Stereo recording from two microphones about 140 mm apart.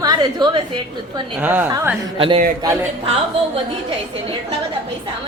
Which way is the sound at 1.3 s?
15° right (ahead or behind).